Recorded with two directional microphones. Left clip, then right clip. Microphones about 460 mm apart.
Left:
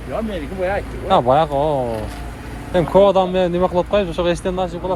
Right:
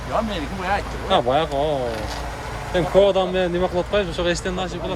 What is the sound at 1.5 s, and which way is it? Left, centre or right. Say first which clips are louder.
Speech: left 3 dB; left.